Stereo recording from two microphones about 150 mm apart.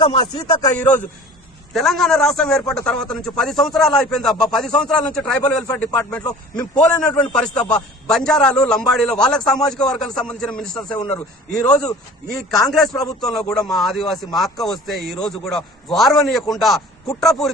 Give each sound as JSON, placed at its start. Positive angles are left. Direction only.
{"t": 0.0, "sound": "speech", "side_deg": 30}
{"t": 1.7, "sound": "a man's voice", "side_deg": 0}
{"t": 12.3, "sound": "a man's voice", "side_deg": 0}